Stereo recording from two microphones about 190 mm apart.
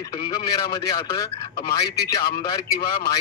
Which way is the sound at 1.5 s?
55° left (ahead or behind).